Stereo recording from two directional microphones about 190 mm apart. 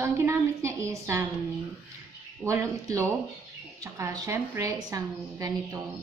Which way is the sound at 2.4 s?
15° right (ahead or behind).